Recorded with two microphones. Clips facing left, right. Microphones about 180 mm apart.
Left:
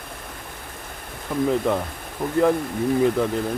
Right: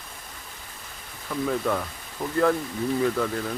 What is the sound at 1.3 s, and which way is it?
Speech, 20° left (ahead or behind).